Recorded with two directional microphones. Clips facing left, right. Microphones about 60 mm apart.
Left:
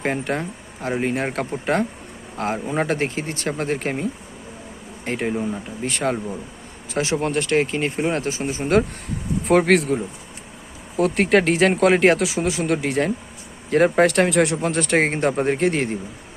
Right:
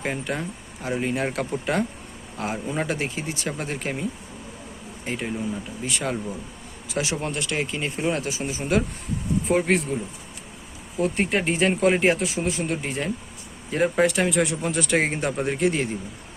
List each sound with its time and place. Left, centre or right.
0.0 s speech: left
5.0 s speech: left
9.4 s speech: left
10.9 s speech: left
13.7 s speech: left